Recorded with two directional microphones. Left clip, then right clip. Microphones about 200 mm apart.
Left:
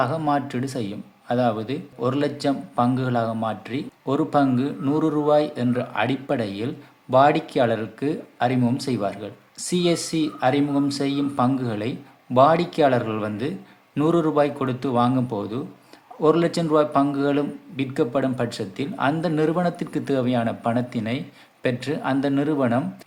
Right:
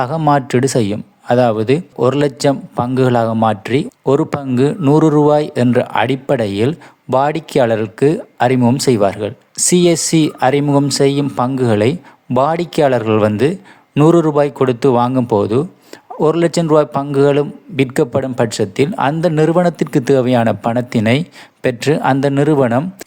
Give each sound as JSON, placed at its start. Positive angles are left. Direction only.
{"t": 0.0, "sound": "speech", "side_deg": -55}